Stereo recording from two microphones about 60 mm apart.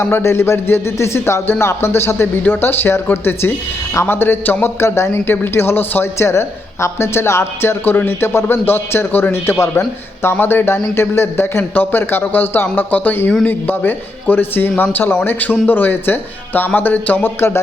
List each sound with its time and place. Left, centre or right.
0.0 s a man's voice: left
17.2 s a man's voice: left